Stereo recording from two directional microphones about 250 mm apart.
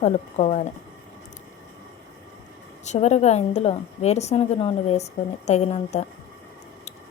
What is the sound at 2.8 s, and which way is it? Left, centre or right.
A woman's voice, left.